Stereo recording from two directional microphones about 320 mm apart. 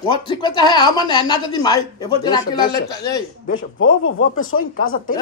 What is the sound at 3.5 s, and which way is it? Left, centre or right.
Speech, left.